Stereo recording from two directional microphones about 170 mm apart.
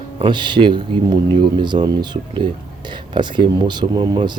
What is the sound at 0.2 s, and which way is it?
Speech, 25° right (ahead or behind).